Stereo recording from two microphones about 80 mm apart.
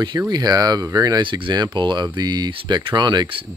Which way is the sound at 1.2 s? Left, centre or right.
Right.